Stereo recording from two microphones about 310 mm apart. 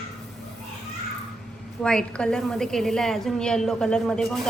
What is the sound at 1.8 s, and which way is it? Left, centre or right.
A woman's voice, centre.